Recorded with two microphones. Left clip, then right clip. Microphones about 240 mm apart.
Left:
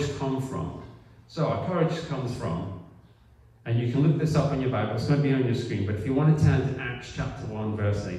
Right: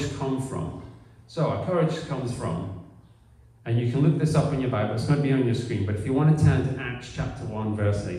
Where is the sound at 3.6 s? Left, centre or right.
Centre.